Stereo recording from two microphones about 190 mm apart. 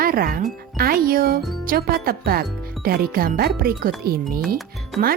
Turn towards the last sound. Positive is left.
turn(degrees=-50)  # may be behind; listen again after turning